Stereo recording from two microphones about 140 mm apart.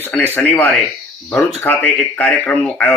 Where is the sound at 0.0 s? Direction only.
10° left (ahead or behind).